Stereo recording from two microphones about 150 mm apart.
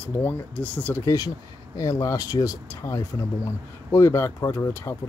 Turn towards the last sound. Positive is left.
turn(degrees=15)  # may be behind; listen again after turning